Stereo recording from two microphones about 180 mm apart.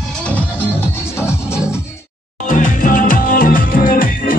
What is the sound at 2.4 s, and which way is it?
Music, 45° left (ahead or behind).